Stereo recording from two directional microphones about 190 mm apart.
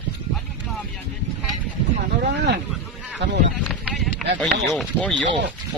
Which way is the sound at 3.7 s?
Centre (ahead or behind).